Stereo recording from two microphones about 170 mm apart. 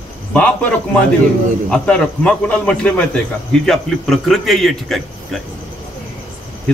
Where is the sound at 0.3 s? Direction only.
5° left (ahead or behind).